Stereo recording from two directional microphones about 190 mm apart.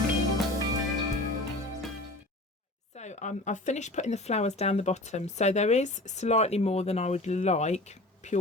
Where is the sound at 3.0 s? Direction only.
40° left (ahead or behind).